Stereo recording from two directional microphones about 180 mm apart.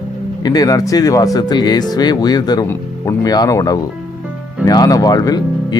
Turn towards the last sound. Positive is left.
turn(degrees=20)  # may be behind; listen again after turning